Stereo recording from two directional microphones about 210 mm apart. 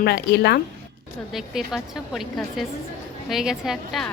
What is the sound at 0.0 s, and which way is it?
Speech, 50° left (ahead or behind).